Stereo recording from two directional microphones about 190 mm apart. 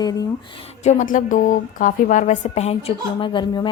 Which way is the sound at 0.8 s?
40° left (ahead or behind).